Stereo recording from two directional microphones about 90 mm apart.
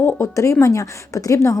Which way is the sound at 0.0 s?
30° left (ahead or behind).